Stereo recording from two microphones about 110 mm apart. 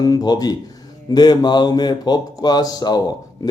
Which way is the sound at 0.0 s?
35° left (ahead or behind).